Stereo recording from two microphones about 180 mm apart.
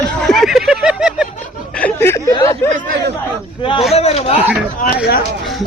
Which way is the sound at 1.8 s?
10° left (ahead or behind).